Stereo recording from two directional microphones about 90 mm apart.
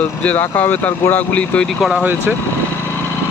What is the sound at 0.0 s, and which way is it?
Speech, 20° left (ahead or behind).